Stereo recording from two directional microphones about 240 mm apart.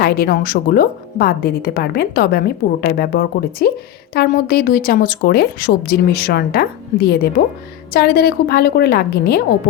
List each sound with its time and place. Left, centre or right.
0.0 s speech: left